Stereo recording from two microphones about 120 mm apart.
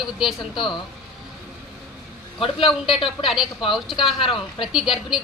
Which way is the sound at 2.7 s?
Centre (ahead or behind).